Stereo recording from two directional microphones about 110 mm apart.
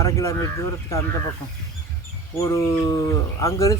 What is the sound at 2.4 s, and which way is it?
Speech, 30° left (ahead or behind).